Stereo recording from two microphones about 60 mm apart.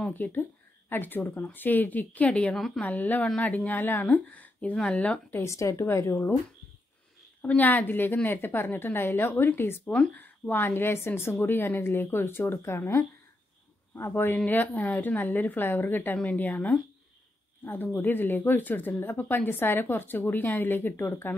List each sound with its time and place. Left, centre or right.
0.1 s a woman's voice: left
2.5 s a woman's voice: centre
2.8 s speech: left
5.4 s speech: left
7.4 s a woman's voice: left
9.9 s a woman's voice: left
17.9 s a woman's voice: left